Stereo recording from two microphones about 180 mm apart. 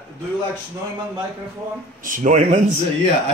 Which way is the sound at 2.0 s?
45° right (ahead or behind).